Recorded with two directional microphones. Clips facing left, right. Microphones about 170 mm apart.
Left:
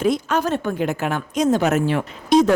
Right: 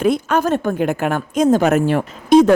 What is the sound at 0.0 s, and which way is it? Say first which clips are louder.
A woman's voice: right 3 dB; 55° right (ahead or behind).